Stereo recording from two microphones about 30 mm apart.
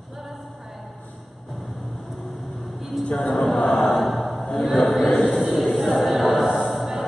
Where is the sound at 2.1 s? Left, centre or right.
Centre.